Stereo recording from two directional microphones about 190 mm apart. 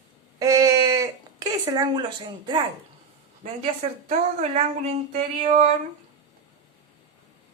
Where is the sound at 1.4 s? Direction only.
20° right (ahead or behind).